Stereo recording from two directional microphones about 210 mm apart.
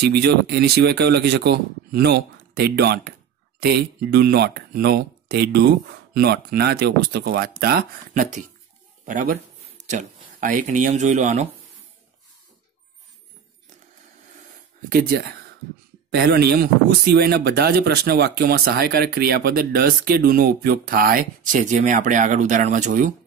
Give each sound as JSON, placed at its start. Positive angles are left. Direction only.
{"t": 0.0, "sound": "speech", "side_deg": -50}
{"t": 8.1, "sound": "speech", "side_deg": -35}
{"t": 14.9, "sound": "speech", "side_deg": -45}